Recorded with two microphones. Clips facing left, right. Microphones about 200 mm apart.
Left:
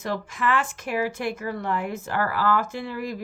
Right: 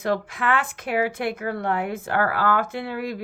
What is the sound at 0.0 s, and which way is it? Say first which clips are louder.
Speech: right 3 dB; 60° right (ahead or behind).